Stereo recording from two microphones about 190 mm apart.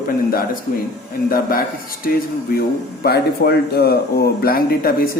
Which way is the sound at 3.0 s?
55° left (ahead or behind).